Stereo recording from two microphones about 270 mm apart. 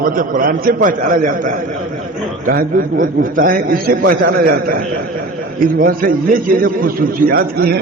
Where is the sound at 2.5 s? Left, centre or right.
Right.